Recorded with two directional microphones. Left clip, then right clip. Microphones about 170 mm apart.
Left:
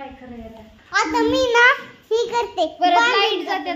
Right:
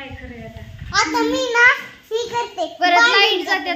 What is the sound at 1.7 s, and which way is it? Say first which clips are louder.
Speech: even; 60° left (ahead or behind).